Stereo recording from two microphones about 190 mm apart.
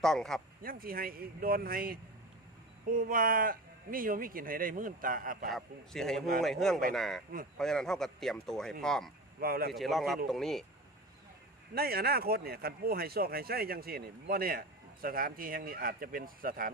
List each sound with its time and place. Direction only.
0.0 s speech: centre (ahead or behind)
0.6 s speech: 50° right (ahead or behind)
5.5 s speech: centre (ahead or behind)
9.4 s speech: 50° right (ahead or behind)
9.7 s speech: centre (ahead or behind)
11.7 s speech: 55° right (ahead or behind)